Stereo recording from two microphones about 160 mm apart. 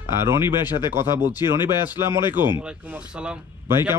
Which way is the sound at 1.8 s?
15° right (ahead or behind).